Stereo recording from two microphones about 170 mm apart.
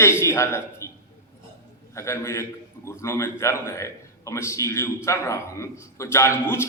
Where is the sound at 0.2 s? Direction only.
15° left (ahead or behind).